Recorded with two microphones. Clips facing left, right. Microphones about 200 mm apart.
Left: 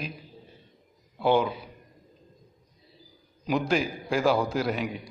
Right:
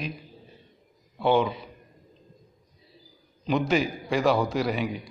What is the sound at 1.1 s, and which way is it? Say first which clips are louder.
Speech: right 1 dB; centre (ahead or behind).